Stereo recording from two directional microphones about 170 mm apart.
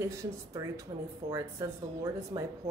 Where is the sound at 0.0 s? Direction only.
15° right (ahead or behind).